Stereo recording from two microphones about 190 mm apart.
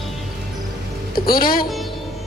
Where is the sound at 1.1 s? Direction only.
50° left (ahead or behind).